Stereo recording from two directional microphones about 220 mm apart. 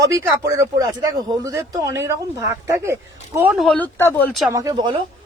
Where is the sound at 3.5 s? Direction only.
5° left (ahead or behind).